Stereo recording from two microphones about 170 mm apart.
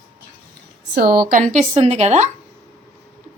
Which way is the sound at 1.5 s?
40° right (ahead or behind).